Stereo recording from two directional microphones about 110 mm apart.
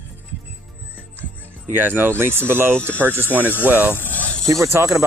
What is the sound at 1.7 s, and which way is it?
Speech, 20° right (ahead or behind).